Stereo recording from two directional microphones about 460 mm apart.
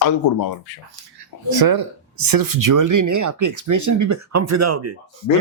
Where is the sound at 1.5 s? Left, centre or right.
Right.